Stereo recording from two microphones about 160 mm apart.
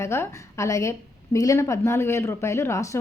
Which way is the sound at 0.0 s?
15° left (ahead or behind).